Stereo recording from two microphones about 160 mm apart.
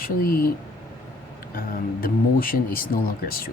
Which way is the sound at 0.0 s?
65° left (ahead or behind).